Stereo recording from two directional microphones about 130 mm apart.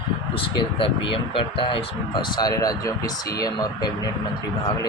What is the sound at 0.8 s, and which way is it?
Speech, 40° left (ahead or behind).